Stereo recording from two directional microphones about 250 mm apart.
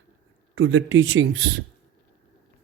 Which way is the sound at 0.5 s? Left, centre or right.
Right.